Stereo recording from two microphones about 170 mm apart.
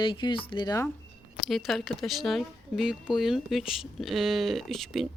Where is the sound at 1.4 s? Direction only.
Centre (ahead or behind).